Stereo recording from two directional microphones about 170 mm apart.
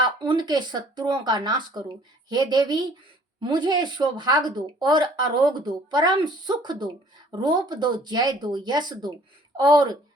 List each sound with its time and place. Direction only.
0.2 s speech: 25° right (ahead or behind)